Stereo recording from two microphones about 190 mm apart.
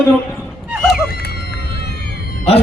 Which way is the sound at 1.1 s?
55° left (ahead or behind).